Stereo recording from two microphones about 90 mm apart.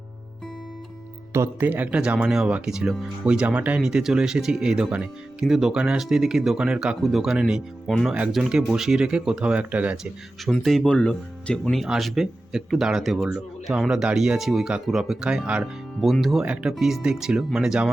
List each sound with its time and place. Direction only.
1.3 s speech: 30° right (ahead or behind)
1.6 s speech: 15° right (ahead or behind)
10.4 s speech: centre (ahead or behind)